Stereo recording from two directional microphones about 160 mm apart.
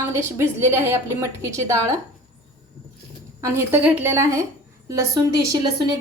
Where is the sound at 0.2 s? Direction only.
15° right (ahead or behind).